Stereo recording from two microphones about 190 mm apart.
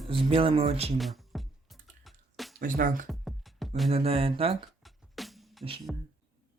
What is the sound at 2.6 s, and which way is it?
Speech, 45° right (ahead or behind).